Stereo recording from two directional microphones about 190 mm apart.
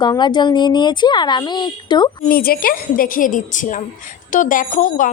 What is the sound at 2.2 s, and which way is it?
A woman's voice, 50° left (ahead or behind).